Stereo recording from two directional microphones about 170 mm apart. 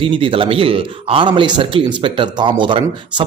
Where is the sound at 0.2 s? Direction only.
30° right (ahead or behind).